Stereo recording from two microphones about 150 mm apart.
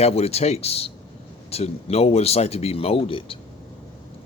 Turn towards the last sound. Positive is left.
turn(degrees=35)  # may be behind; listen again after turning